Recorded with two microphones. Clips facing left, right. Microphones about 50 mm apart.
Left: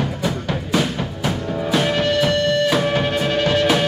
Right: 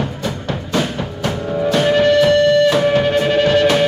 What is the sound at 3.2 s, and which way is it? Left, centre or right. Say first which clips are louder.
Music: right 5 dB; centre.